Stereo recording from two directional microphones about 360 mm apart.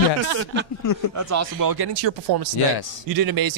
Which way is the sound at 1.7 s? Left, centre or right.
Right.